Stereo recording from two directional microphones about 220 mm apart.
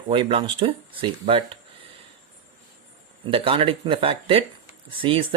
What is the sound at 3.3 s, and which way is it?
Speech, 25° right (ahead or behind).